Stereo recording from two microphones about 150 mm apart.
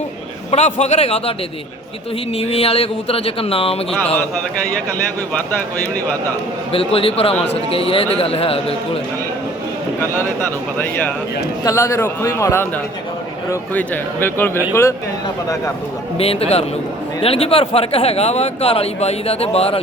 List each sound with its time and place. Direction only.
0.5 s a man's voice: 50° left (ahead or behind)
2.3 s a man's voice: 40° left (ahead or behind)
5.4 s a man's voice: 10° left (ahead or behind)
6.7 s a man's voice: 40° left (ahead or behind)
10.8 s a man's voice: 15° left (ahead or behind)
16.1 s a man's voice: 40° left (ahead or behind)